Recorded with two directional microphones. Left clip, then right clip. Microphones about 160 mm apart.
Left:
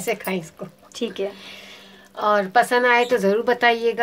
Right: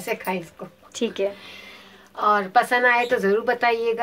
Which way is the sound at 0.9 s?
10° right (ahead or behind).